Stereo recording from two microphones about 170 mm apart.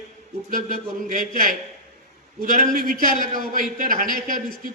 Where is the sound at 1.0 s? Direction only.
55° right (ahead or behind).